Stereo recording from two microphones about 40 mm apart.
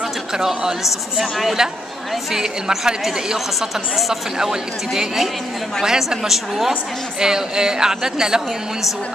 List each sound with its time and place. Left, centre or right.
0.4 s speech: centre